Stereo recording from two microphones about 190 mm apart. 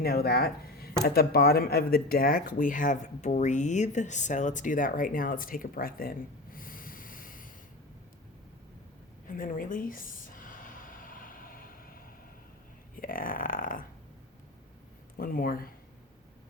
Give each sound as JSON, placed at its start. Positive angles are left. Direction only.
{"t": 0.0, "sound": "speech", "side_deg": 55}
{"t": 9.2, "sound": "a sound", "side_deg": 45}
{"t": 13.0, "sound": "speech", "side_deg": 45}
{"t": 15.2, "sound": "speech", "side_deg": 50}